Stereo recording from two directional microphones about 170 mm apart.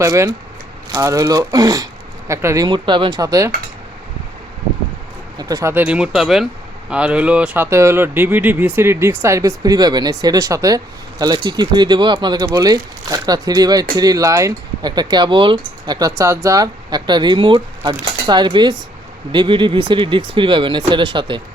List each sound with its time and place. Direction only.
0.0 s speech: 20° right (ahead or behind)
2.6 s speech: 25° right (ahead or behind)
5.4 s speech: 20° right (ahead or behind)